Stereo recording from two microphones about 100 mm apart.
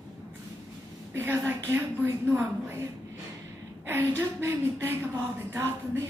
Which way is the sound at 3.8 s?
20° right (ahead or behind).